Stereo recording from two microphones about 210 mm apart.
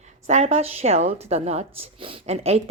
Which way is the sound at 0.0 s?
35° right (ahead or behind).